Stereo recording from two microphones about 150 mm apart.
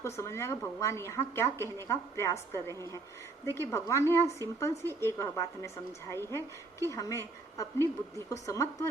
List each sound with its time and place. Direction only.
0.0 s a woman's voice: 20° left (ahead or behind)